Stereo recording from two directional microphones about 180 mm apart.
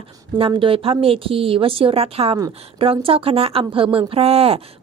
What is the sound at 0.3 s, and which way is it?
A woman's voice, 30° right (ahead or behind).